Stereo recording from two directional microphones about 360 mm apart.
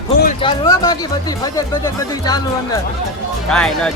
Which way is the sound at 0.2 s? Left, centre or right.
Left.